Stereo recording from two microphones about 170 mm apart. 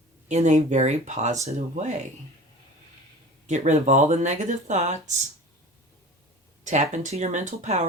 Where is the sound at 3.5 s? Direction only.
45° right (ahead or behind).